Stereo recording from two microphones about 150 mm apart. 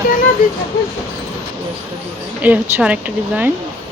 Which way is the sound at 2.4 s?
10° right (ahead or behind).